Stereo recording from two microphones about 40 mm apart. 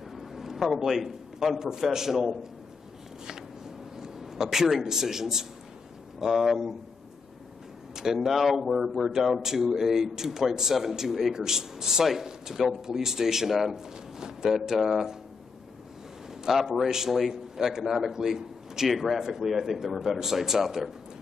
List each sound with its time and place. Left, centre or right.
0.1 s a man's voice: centre
3.9 s a man's voice: centre
7.9 s speech: centre
16.4 s speech: centre